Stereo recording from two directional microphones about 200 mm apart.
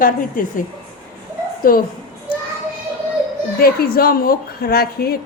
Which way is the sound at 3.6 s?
45° left (ahead or behind).